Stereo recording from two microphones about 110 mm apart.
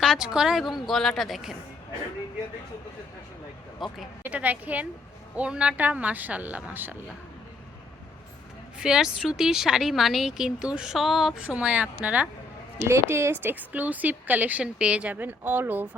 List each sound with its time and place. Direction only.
0.0 s speech: 5° right (ahead or behind)
3.8 s speech: centre (ahead or behind)
4.2 s a woman's voice: 15° right (ahead or behind)
8.8 s speech: 5° right (ahead or behind)
11.4 s a woman's voice: 10° right (ahead or behind)
12.9 s a woman's voice: 25° right (ahead or behind)